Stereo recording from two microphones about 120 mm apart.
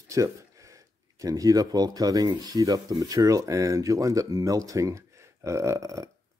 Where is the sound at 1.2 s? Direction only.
30° right (ahead or behind).